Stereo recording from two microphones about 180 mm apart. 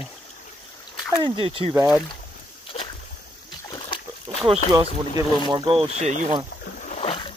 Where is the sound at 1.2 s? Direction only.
30° right (ahead or behind).